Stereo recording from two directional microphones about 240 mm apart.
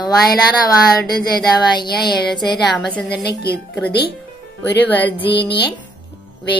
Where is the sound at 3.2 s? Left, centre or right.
Left.